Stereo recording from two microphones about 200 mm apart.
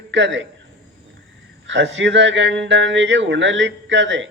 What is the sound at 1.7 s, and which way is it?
Speech, 65° right (ahead or behind).